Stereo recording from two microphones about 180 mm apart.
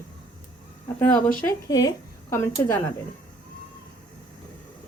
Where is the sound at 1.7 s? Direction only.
20° left (ahead or behind).